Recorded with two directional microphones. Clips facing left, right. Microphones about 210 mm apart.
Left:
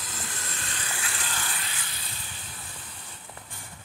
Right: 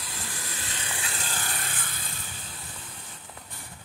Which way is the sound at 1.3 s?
40° right (ahead or behind).